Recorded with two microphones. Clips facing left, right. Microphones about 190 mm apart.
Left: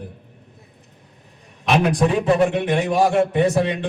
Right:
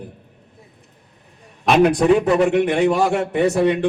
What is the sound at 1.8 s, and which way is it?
A man's voice, 65° right (ahead or behind).